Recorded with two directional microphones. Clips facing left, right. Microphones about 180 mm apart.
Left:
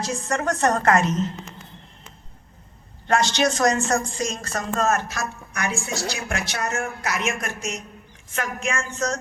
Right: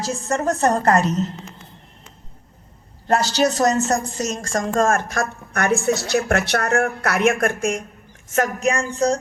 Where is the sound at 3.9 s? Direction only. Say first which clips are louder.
Right 2 dB; 40° right (ahead or behind); by 7.8 s 55° right (ahead or behind).